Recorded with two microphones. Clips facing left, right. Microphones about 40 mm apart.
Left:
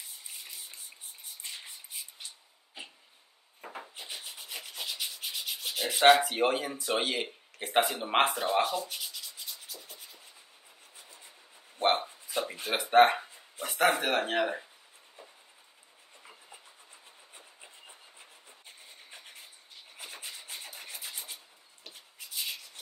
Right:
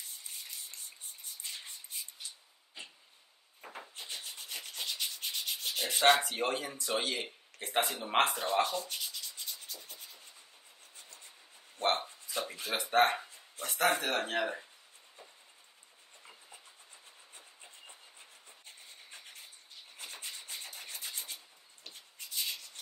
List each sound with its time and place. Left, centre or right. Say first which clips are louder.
3.6 s rub: left 3 dB; centre
6.2 s speech: left 6 dB; left
8.4 s rub: left 3 dB; centre
11.8 s a sound: left 4 dB; left
12.5 s speech: left 6 dB; left
13.2 s a sound: left 3 dB; centre
13.8 s speech: left 4 dB; centre
16.2 s train: left 2 dB; centre
20.0 s rub: left 2 dB; centre